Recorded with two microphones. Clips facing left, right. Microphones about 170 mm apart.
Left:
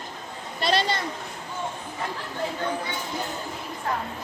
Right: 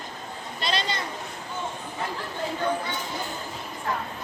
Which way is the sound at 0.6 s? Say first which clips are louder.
Left 5 dB; 55° left (ahead or behind).